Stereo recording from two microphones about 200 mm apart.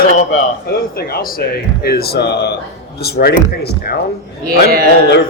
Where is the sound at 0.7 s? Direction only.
50° left (ahead or behind).